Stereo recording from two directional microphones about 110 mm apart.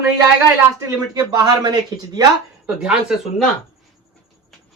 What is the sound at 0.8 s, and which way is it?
Speech, 35° right (ahead or behind).